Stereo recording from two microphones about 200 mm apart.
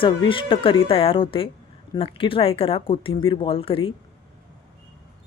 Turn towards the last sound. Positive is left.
turn(degrees=25)  # may be behind; listen again after turning